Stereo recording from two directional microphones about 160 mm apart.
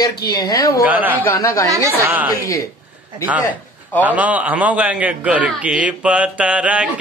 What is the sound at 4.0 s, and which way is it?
A man's voice, 10° right (ahead or behind).